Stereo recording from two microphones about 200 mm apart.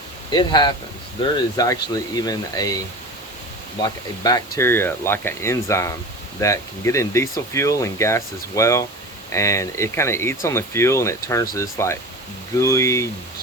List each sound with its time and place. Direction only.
0.3 s speech: 20° left (ahead or behind)
3.8 s speech: 20° left (ahead or behind)